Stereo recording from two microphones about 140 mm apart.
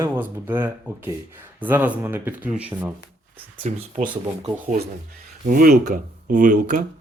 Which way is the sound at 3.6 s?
55° right (ahead or behind).